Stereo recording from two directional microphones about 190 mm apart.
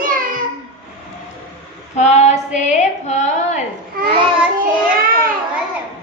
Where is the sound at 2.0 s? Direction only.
35° left (ahead or behind).